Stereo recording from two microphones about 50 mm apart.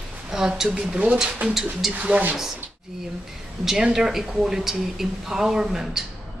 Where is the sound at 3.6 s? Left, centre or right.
Centre.